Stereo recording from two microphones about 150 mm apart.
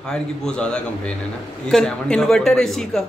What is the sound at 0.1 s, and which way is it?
Speech, 5° left (ahead or behind).